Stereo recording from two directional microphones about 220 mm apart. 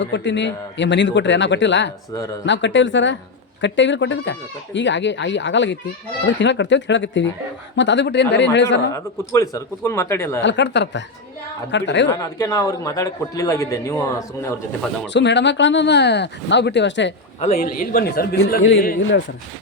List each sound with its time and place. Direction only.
0.0 s speech: 55° left (ahead or behind)
8.9 s a man's voice: 15° left (ahead or behind)
10.4 s speech: 55° left (ahead or behind)
12.4 s a man's voice: 15° left (ahead or behind)
15.1 s speech: 50° left (ahead or behind)
17.4 s a man's voice: 35° left (ahead or behind)